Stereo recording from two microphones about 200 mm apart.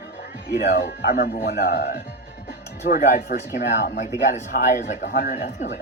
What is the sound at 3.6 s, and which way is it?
Speech, 60° left (ahead or behind).